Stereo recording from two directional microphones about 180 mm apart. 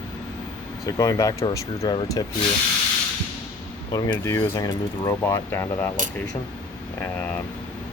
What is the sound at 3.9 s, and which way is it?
Speech, 15° left (ahead or behind).